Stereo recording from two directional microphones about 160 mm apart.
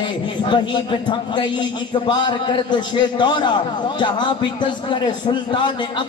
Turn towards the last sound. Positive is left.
turn(degrees=30)  # may be behind; listen again after turning